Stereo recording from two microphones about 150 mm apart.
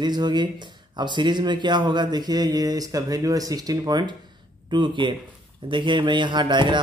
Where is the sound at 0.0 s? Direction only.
30° right (ahead or behind).